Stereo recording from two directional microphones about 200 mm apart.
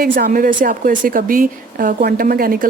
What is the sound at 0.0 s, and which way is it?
A woman's voice, 45° right (ahead or behind).